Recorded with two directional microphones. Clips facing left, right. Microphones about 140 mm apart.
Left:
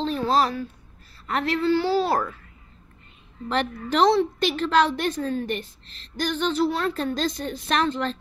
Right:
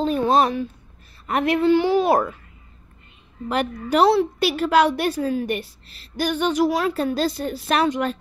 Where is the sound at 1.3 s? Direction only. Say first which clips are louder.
Right 5 dB; 15° right (ahead or behind).